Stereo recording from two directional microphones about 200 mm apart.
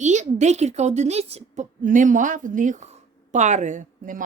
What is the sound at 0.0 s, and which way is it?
A woman's voice, 35° right (ahead or behind).